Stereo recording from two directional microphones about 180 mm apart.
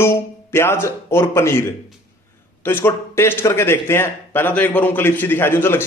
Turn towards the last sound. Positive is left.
turn(degrees=10)  # may be behind; listen again after turning